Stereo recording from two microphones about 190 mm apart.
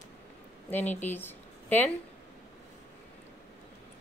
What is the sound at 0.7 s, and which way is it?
A woman's voice, 10° left (ahead or behind).